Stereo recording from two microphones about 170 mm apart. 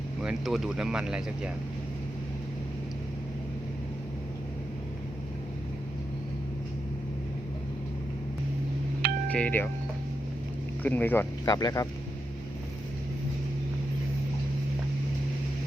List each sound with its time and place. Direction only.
0.2 s speech: 5° right (ahead or behind)
9.3 s speech: 10° left (ahead or behind)
10.8 s speech: 10° left (ahead or behind)
11.4 s speech: 25° left (ahead or behind)